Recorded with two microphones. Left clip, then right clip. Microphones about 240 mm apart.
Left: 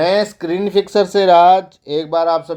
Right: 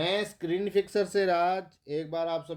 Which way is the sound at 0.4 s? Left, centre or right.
Left.